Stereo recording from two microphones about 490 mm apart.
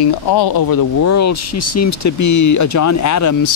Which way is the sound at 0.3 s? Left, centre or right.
Left.